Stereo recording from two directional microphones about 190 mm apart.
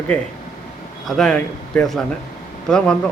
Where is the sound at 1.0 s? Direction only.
Centre (ahead or behind).